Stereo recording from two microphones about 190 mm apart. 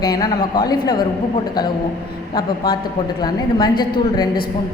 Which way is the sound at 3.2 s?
20° left (ahead or behind).